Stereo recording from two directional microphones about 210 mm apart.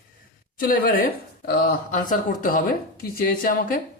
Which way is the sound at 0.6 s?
45° left (ahead or behind).